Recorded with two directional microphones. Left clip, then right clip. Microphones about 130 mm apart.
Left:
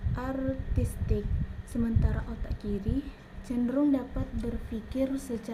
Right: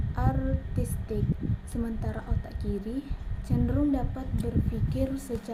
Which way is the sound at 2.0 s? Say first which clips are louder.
Right 1 dB; 20° left (ahead or behind).